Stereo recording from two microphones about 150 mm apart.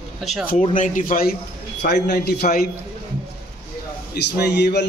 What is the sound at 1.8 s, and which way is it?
Speech, 90° left.